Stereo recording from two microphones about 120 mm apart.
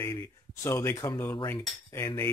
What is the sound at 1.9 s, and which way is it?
Cutlery, 25° left (ahead or behind).